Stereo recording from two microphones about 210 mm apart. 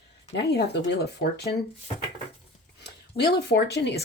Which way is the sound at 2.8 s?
50° left (ahead or behind).